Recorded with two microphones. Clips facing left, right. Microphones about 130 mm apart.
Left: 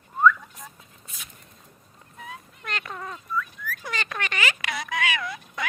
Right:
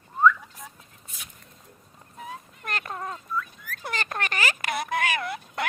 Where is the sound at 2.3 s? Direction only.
40° right (ahead or behind).